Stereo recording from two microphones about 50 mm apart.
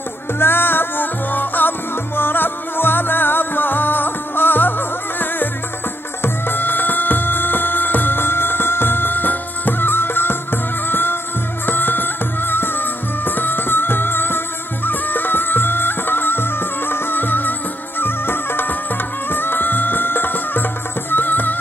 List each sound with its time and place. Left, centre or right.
0.4 s music: left